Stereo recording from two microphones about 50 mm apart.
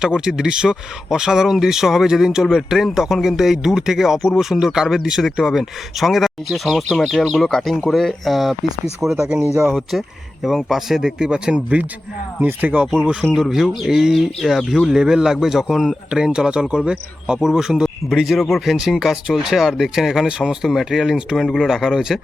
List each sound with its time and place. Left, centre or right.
0.0 s speech: centre
10.7 s speech: centre
12.4 s speech: right
13.3 s speech: centre
18.3 s speech: centre